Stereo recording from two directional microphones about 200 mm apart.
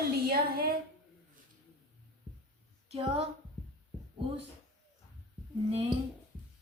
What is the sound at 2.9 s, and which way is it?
Speech, 30° right (ahead or behind).